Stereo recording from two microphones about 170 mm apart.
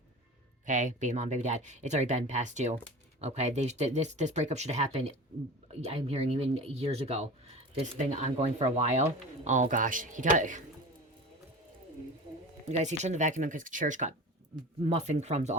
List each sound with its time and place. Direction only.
0.6 s speech: 50° right (ahead or behind)
12.6 s speech: 40° right (ahead or behind)